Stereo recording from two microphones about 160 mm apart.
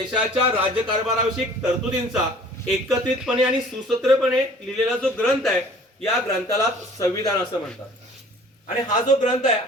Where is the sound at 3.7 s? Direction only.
Centre (ahead or behind).